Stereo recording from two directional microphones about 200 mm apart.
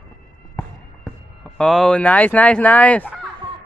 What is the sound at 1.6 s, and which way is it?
Speech, 5° left (ahead or behind).